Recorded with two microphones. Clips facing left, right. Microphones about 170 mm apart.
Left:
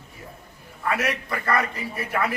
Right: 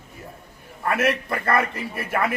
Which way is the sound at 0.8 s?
55° right (ahead or behind).